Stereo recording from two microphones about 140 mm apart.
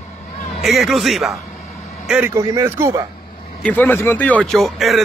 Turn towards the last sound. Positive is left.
turn(degrees=0)  # may be behind; listen again after turning